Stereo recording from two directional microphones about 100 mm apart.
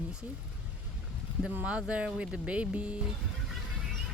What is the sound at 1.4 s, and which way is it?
Speech, 10° right (ahead or behind).